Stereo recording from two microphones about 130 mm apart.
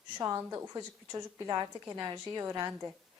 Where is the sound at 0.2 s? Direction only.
25° right (ahead or behind).